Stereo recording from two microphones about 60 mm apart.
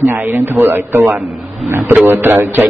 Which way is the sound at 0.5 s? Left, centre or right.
Right.